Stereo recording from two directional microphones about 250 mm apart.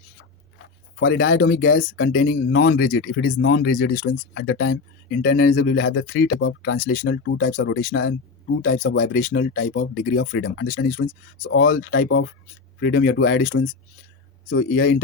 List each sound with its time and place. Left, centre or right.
0.9 s speech: left
7.3 s speech: left
9.1 s speech: left
10.7 s speech: left
11.0 s speech: left
11.8 s speech: left
12.0 s speech: left
14.5 s speech: left